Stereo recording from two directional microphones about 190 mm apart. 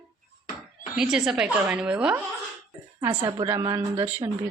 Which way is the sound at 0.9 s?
5° right (ahead or behind).